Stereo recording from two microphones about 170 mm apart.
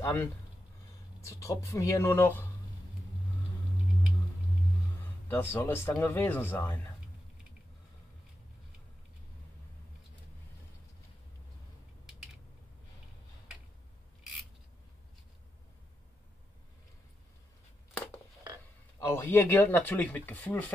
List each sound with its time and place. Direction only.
0.0 s speech: 10° left (ahead or behind)
5.3 s speech: 10° left (ahead or behind)
18.9 s speech: 15° left (ahead or behind)